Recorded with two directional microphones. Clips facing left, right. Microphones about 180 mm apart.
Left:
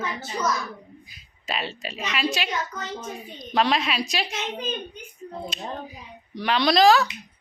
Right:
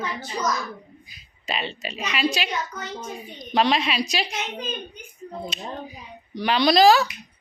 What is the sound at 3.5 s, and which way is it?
Speech, centre (ahead or behind).